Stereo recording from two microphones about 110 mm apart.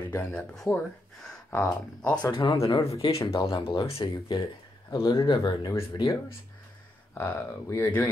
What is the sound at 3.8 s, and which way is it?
Speech, 60° left (ahead or behind).